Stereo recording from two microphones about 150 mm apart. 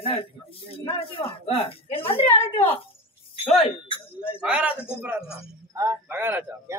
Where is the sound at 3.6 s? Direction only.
35° left (ahead or behind).